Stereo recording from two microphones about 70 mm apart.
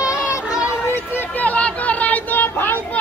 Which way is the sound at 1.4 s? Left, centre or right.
Centre.